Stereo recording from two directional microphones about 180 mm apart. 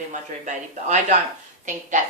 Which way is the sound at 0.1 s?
45° right (ahead or behind).